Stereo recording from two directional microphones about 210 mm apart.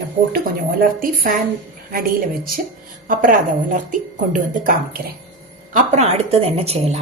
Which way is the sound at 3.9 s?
40° right (ahead or behind).